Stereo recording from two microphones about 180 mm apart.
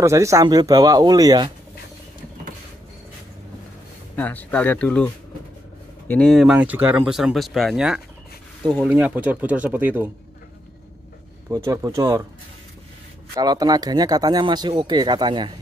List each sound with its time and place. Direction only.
0.0 s speech: 15° right (ahead or behind)
4.2 s speech: 10° left (ahead or behind); by 10.1 s 10° right (ahead or behind)
11.5 s speech: 20° right (ahead or behind)
13.3 s speech: 20° right (ahead or behind)